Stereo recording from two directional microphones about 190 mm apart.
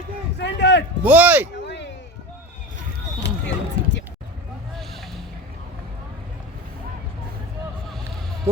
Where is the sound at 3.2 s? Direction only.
70° left (ahead or behind).